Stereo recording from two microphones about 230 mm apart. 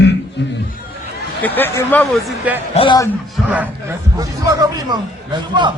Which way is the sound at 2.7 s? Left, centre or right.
Left.